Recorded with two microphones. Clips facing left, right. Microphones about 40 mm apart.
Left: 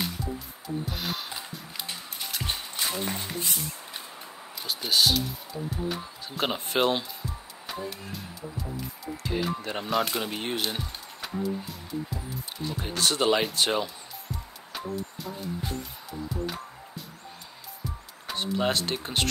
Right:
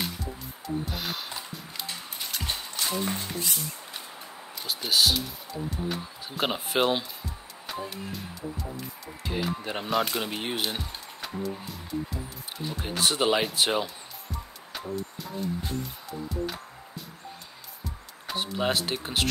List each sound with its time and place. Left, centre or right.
0.8 s music: centre
2.4 s music: centre
4.6 s speech: centre
7.6 s music: centre
9.1 s speech: centre
12.7 s speech: centre
14.3 s music: centre
18.2 s speech: centre